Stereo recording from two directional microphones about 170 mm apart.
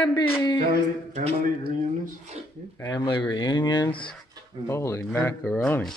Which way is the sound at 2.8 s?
25° left (ahead or behind).